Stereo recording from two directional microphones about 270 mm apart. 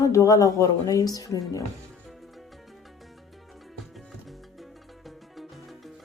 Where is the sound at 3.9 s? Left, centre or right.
Centre.